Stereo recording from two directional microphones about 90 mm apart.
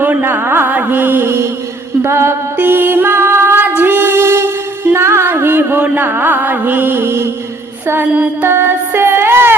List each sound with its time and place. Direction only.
0.0 s music: 20° right (ahead or behind)